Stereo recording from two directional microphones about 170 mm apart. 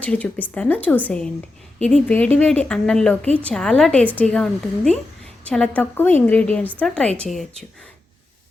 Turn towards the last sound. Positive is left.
turn(degrees=5)  # may be behind; listen again after turning